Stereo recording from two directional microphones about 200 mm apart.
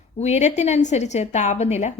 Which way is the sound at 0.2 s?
35° left (ahead or behind).